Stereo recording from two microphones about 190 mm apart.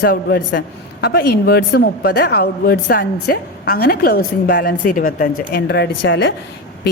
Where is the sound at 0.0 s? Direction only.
55° left (ahead or behind).